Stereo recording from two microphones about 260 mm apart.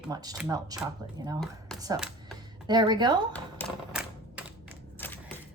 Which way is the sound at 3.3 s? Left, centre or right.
Centre.